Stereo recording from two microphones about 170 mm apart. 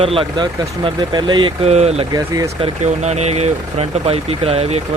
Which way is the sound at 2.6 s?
40° right (ahead or behind).